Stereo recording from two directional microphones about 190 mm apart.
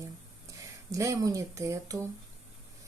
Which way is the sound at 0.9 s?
15° right (ahead or behind).